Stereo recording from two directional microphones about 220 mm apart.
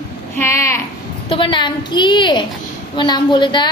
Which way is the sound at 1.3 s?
20° left (ahead or behind).